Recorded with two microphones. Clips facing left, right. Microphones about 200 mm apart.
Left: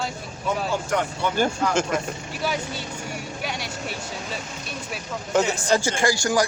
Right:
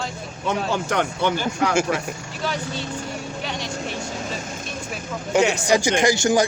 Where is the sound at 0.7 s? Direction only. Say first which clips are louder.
Right 2 dB; 75° right (ahead or behind).